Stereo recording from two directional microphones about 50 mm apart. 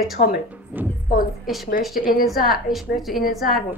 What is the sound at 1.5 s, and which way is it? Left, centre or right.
A woman's voice, centre.